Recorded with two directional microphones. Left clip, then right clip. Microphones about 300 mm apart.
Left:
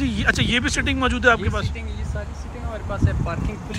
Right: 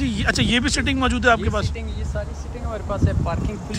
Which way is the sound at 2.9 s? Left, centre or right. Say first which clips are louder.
Right 2 dB; right.